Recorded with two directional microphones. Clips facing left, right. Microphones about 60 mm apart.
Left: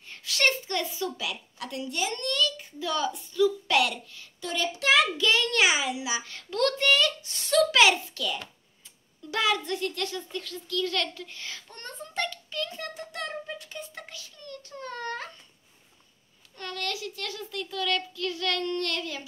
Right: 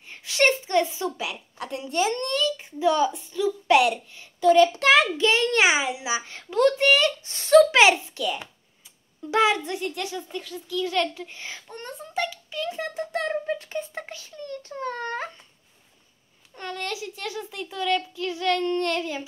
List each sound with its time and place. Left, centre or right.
0.0 s a woman's voice: right
4.5 s a child's voice: right; by 12.9 s centre
12.9 s a sound: right
13.3 s a child's voice: right
16.5 s a child's voice: right